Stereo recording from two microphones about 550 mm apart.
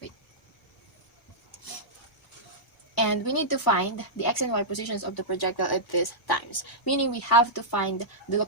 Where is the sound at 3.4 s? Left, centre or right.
Left.